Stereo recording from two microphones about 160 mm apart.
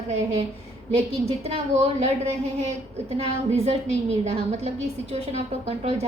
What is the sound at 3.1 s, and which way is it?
A woman's voice, 40° right (ahead or behind).